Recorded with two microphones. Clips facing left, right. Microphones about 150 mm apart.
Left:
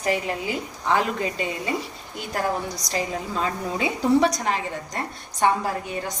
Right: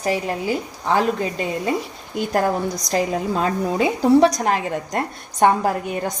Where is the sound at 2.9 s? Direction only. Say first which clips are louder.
Right 6 dB; 50° right (ahead or behind).